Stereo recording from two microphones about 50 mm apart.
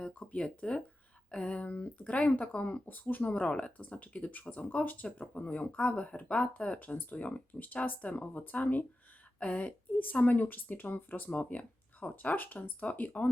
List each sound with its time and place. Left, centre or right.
0.2 s speech: centre
6.7 s speech: left